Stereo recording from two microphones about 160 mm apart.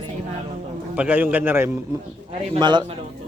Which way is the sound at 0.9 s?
10° right (ahead or behind).